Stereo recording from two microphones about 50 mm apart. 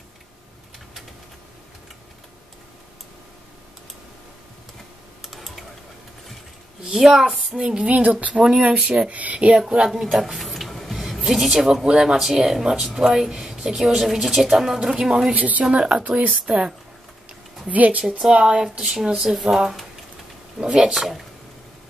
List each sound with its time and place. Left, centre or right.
5.2 s typing: centre
6.8 s speech: centre
7.8 s speech: right
8.4 s speech: centre
10.1 s speech: centre
15.3 s a woman's voice: right
18.3 s speech: centre
19.0 s speech: centre